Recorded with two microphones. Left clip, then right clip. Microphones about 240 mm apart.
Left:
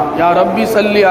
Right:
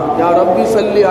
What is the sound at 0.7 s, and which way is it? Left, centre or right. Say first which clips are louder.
Chant: even; left.